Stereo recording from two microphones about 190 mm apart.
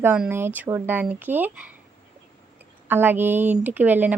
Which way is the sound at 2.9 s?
10° right (ahead or behind).